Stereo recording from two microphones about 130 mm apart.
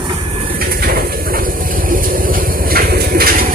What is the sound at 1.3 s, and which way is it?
Vehicle, 90° right.